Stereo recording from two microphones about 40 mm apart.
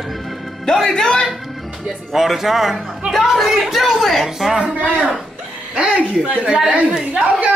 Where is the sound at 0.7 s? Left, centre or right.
Centre.